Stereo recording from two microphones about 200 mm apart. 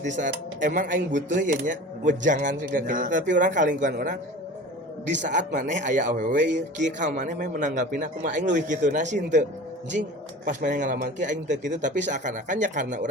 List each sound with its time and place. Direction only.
0.0 s speech: 40° right (ahead or behind)
5.3 s speech: 40° right (ahead or behind)